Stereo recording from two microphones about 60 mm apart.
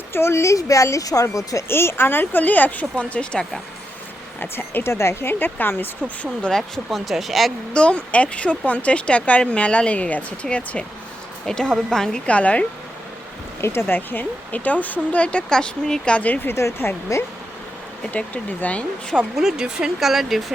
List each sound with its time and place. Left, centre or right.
0.1 s speech: left
1.6 s speech: left; by 3.6 s centre
4.4 s speech: left
5.3 s speech: left
6.5 s speech: centre
7.7 s speech: centre
13.8 s speech: left
16.5 s speech: left
17.1 s speech: left
18.1 s speech: left
19.4 s speech: centre